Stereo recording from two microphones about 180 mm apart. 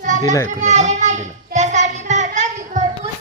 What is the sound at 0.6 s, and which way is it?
Child singing, 40° right (ahead or behind).